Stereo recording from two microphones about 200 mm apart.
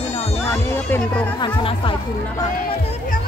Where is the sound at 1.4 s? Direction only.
25° left (ahead or behind).